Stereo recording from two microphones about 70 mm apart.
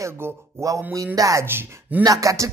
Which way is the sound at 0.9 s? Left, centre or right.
Right.